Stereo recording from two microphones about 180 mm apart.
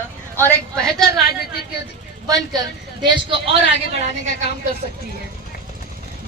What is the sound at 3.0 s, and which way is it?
Speech, 30° right (ahead or behind).